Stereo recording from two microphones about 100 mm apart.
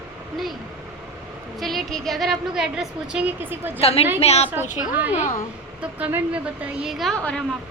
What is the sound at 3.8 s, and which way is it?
Speech, 80° left.